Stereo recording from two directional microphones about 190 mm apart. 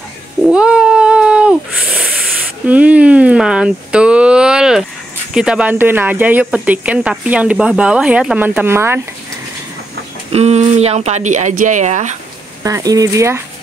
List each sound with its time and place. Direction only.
0.5 s cat: 5° right (ahead or behind)
5.3 s speech: 5° right (ahead or behind)
10.3 s speech: 35° right (ahead or behind)
12.6 s speech: 20° right (ahead or behind)